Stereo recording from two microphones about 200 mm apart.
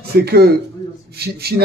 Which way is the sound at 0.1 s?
50° right (ahead or behind).